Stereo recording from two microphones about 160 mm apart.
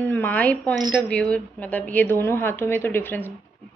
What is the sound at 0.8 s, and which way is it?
Speech, 25° right (ahead or behind).